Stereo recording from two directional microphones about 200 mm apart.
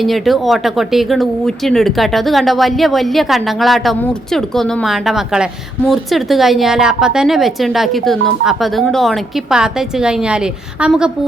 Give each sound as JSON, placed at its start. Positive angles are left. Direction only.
{"t": 0.0, "sound": "speech", "side_deg": 0}